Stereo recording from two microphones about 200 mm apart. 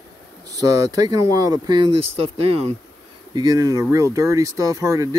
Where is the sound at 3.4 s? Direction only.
20° right (ahead or behind).